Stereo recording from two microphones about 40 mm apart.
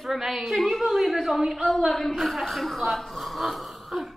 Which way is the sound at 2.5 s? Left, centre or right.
Centre.